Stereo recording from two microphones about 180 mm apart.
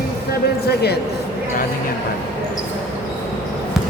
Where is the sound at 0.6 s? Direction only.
65° left (ahead or behind).